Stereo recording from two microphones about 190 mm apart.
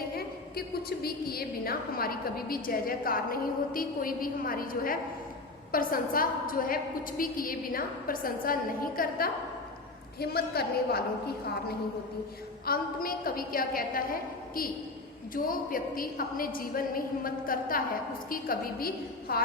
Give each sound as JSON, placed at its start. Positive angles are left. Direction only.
{"t": 0.2, "sound": "a woman's voice", "side_deg": 55}
{"t": 12.6, "sound": "a woman's voice", "side_deg": 50}